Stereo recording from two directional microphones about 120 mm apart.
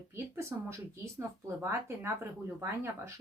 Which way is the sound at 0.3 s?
25° right (ahead or behind).